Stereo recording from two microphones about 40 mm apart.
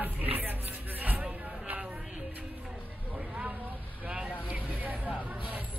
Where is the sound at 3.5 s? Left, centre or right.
Right.